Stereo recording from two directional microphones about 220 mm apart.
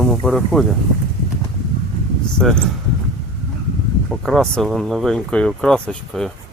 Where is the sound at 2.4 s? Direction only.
5° left (ahead or behind).